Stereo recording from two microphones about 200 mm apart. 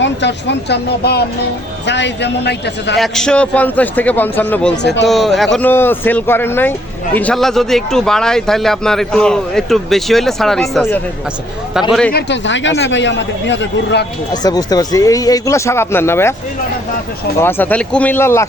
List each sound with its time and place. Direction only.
0.0 s speech: 60° left (ahead or behind)
3.0 s speech: 5° left (ahead or behind)
4.8 s speech: 60° left (ahead or behind)
5.0 s a man's voice: centre (ahead or behind)
12.1 s speech: 65° left (ahead or behind)
14.4 s speech: 20° left (ahead or behind)
17.4 s speech: 10° left (ahead or behind)